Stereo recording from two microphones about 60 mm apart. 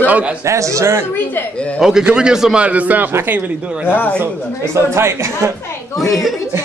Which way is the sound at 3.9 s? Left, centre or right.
Left.